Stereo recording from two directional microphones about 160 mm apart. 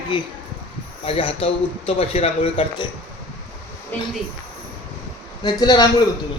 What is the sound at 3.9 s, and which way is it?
Speech, 10° left (ahead or behind).